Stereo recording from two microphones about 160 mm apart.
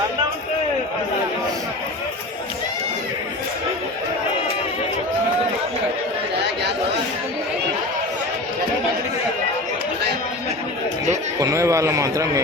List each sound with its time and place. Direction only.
11.3 s a man's voice: 20° right (ahead or behind)